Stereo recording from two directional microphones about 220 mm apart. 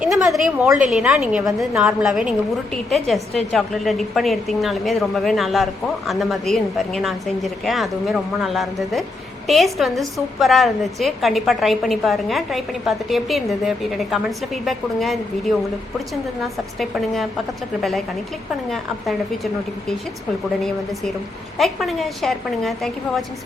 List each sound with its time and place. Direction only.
0.0 s a woman's voice: centre (ahead or behind)
16.9 s a woman's voice: centre (ahead or behind)
21.6 s a woman's voice: centre (ahead or behind)